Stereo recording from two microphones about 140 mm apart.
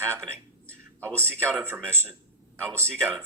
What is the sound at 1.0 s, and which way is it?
Speech, 10° left (ahead or behind).